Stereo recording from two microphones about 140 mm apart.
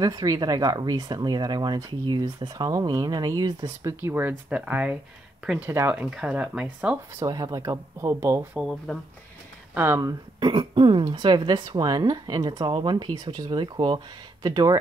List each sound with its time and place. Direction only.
0.0 s speech: 25° right (ahead or behind)
4.0 s speech: 15° right (ahead or behind)
7.2 s speech: 25° right (ahead or behind)
8.5 s speech: centre (ahead or behind)
9.8 s speech: 20° right (ahead or behind)
10.4 s speech: 35° right (ahead or behind)